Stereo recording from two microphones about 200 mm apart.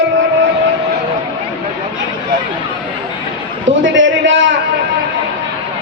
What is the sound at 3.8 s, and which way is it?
Speech, 65° right (ahead or behind).